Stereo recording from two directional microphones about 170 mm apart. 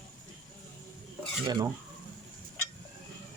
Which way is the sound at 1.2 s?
25° right (ahead or behind).